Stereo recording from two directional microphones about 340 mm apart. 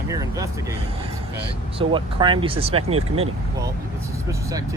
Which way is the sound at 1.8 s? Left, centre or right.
Centre.